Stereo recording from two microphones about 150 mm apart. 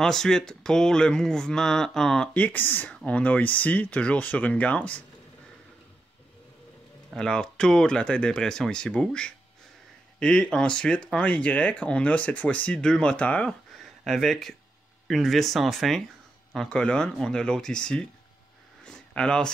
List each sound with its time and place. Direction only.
0.0 s speech: 5° left (ahead or behind)
7.2 s speech: 5° left (ahead or behind)
18.9 s a sound: 5° left (ahead or behind)